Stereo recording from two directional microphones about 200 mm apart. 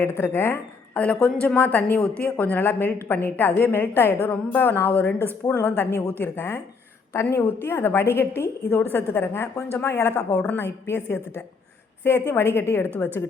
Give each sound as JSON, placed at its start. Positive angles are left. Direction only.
{"t": 0.0, "sound": "a woman's voice", "side_deg": 10}